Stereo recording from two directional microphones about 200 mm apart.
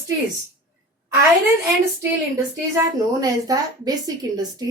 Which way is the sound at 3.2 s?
20° right (ahead or behind).